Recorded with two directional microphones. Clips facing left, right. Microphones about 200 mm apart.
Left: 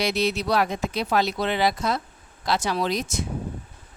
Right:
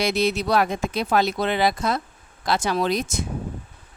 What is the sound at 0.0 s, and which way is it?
Speech, 50° right (ahead or behind).